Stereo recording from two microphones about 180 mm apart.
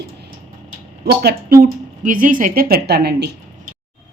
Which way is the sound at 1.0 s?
60° right (ahead or behind).